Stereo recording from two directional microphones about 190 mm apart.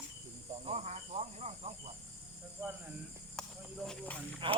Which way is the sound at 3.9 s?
5° left (ahead or behind).